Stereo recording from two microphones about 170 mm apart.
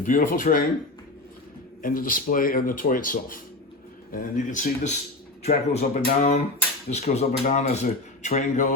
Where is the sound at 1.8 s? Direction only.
55° left (ahead or behind).